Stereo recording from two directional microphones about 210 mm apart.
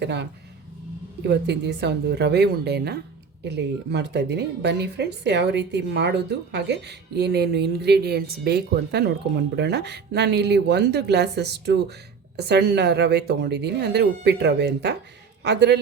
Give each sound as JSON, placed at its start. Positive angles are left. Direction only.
{"t": 0.0, "sound": "speech", "side_deg": -55}
{"t": 1.3, "sound": "a man's voice", "side_deg": -55}